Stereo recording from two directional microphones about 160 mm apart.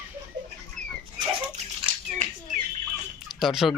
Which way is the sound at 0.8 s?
50° right (ahead or behind).